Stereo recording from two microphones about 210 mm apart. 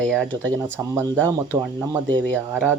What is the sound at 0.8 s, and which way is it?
Speech, 15° right (ahead or behind).